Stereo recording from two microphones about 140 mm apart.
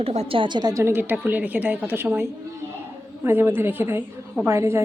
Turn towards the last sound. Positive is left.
turn(degrees=-20)  # may be behind; listen again after turning